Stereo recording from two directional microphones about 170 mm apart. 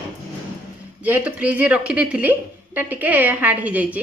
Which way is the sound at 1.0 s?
10° right (ahead or behind).